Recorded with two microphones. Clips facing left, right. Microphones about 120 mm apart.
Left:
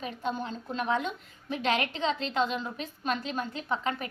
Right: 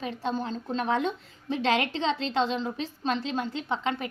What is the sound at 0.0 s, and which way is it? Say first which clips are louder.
A woman's voice: right 3 dB; 35° right (ahead or behind).